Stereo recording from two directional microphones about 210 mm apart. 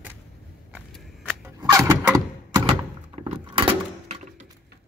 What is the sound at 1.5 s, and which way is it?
Vehicle, 15° right (ahead or behind).